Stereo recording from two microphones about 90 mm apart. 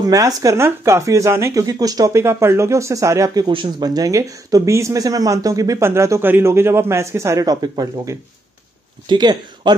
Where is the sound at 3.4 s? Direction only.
60° right (ahead or behind); by 7.4 s 30° right (ahead or behind).